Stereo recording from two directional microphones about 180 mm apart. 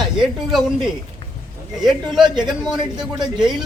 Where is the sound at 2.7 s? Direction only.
25° right (ahead or behind).